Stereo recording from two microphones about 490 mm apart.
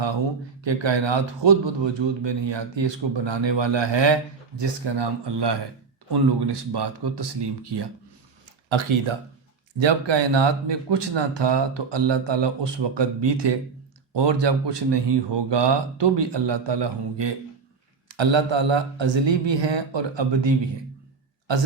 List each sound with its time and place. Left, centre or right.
0.6 s speech: right
8.7 s speech: right